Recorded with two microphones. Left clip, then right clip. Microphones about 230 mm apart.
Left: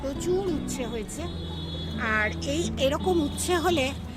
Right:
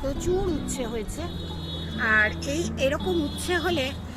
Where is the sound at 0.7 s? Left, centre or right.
Centre.